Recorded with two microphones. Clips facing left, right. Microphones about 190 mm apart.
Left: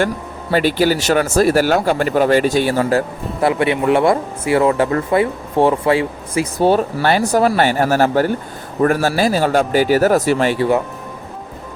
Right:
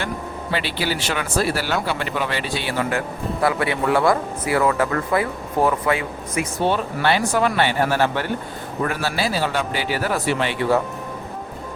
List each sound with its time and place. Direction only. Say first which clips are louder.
0.5 s speech: left 10 dB; 45° left (ahead or behind)
3.4 s speech: left 6 dB; 25° left (ahead or behind); by 10.7 s 40° left (ahead or behind)